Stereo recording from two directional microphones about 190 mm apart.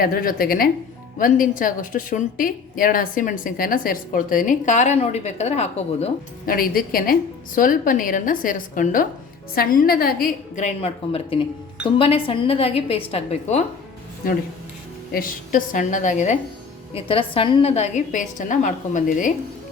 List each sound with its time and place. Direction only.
0.0 s a woman's voice: 50° left (ahead or behind); by 6.1 s 35° left (ahead or behind)
6.4 s a woman's voice: 50° left (ahead or behind)
15.1 s a woman's voice: 45° left (ahead or behind)
16.9 s a woman's voice: 30° left (ahead or behind)